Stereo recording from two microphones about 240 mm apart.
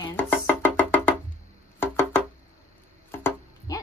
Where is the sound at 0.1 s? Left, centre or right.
Centre.